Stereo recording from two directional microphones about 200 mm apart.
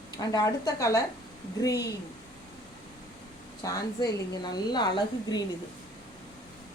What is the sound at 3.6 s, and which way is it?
A woman's voice, 15° left (ahead or behind).